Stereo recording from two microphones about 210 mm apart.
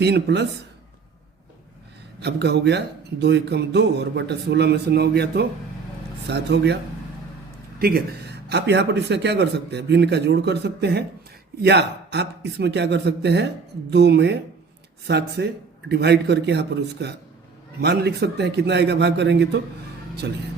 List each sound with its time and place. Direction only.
0.0 s speech: 55° right (ahead or behind)
2.2 s speech: 50° right (ahead or behind)
7.8 s speech: 50° right (ahead or behind)